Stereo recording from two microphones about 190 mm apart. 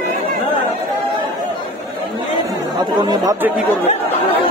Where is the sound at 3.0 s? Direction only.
20° right (ahead or behind).